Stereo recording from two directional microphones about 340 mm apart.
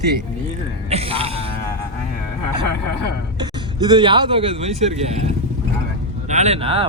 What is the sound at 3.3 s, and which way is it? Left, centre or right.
Speech, centre.